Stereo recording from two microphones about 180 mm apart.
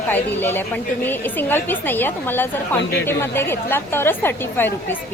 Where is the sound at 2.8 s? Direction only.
75° left (ahead or behind).